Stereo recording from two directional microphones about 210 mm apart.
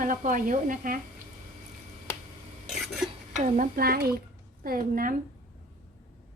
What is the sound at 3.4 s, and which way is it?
Speech, 40° right (ahead or behind).